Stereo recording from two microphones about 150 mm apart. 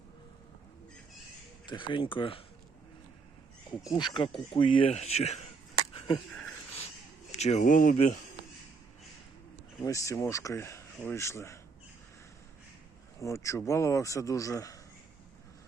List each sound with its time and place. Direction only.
1.6 s speech: 30° left (ahead or behind)
3.9 s speech: 30° left (ahead or behind); by 5.4 s 45° left (ahead or behind)
5.9 s a sound: 40° left (ahead or behind)
7.3 s speech: 50° left (ahead or behind)
9.8 s speech: 20° left (ahead or behind)
13.1 s speech: 20° left (ahead or behind)